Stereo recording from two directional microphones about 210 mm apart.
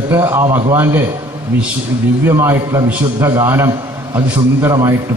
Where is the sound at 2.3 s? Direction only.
10° right (ahead or behind).